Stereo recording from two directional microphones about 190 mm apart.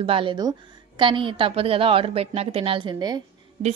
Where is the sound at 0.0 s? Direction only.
30° right (ahead or behind).